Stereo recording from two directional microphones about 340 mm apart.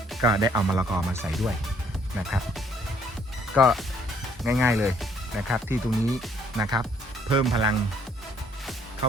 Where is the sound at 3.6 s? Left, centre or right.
Centre.